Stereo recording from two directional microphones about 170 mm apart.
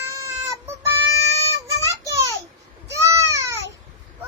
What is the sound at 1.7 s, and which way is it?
Child singing, 20° right (ahead or behind).